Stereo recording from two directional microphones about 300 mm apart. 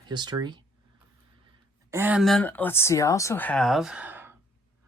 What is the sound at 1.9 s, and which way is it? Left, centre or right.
Speech, centre.